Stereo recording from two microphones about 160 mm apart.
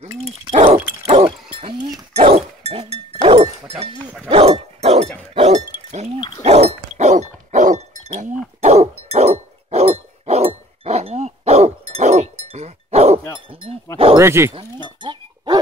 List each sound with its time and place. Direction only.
0.5 s dog: 40° right (ahead or behind)
1.0 s a sound: 40° right (ahead or behind)
2.1 s dog: 40° right (ahead or behind)
6.4 s chink: 40° right (ahead or behind)
14.1 s speech: 15° right (ahead or behind)
15.0 s chink: 30° right (ahead or behind)